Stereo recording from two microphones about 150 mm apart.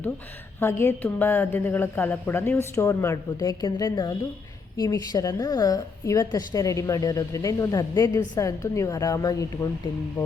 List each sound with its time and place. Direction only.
0.6 s a woman's voice: 15° left (ahead or behind)